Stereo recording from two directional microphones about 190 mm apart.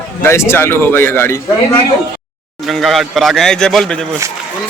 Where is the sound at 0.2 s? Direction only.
15° left (ahead or behind).